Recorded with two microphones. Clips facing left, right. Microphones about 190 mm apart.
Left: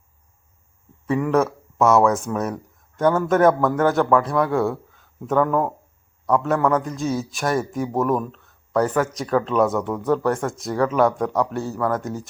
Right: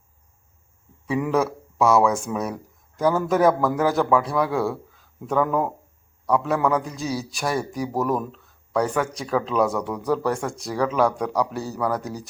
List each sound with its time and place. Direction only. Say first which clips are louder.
1.0 s a man's voice: left 3 dB; centre (ahead or behind)